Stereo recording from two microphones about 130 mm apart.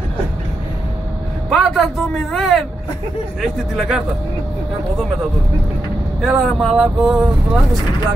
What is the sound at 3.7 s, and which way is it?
Speech, centre (ahead or behind).